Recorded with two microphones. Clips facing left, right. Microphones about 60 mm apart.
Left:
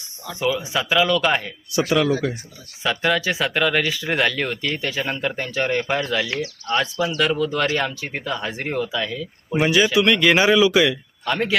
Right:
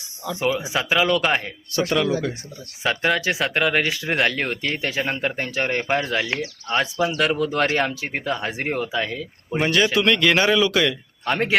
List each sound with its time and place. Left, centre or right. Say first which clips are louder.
0.4 s speech: left 1 dB; right
0.8 s speech: left 1 dB; centre
1.9 s speech: left 2 dB; centre
2.8 s speech: even; centre
9.6 s speech: left 2 dB; centre
11.3 s speech: even; right